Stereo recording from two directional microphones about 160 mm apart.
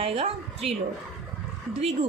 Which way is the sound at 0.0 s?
40° right (ahead or behind).